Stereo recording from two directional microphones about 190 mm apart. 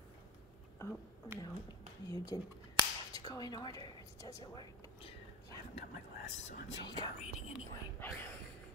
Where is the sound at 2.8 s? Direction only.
30° right (ahead or behind).